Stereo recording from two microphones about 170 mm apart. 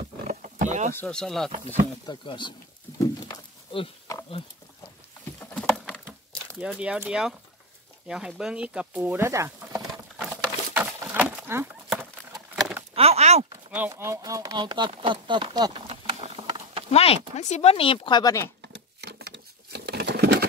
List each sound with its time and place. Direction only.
0.3 s wild animals: 50° right (ahead or behind)
0.9 s speech: 5° left (ahead or behind)
2.0 s speech: 25° left (ahead or behind)
5.4 s rowboat: 5° left (ahead or behind)
6.6 s speech: 5° right (ahead or behind)
9.8 s patter: centre (ahead or behind)
10.3 s a sound: 10° right (ahead or behind)
12.9 s a sound: 35° right (ahead or behind)
13.7 s speech: 10° right (ahead or behind); by 15.8 s 25° right (ahead or behind)
15.9 s patter: 30° right (ahead or behind)
16.9 s speech: 35° left (ahead or behind); by 18.5 s 20° left (ahead or behind)
18.7 s patter: 75° right (ahead or behind)